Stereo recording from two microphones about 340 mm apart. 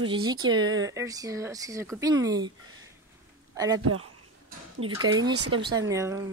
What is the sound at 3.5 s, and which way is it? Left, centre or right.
Speech, centre.